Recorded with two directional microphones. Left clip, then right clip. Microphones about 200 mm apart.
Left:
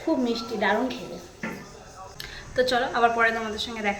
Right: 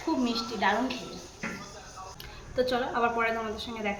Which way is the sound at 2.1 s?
Centre (ahead or behind).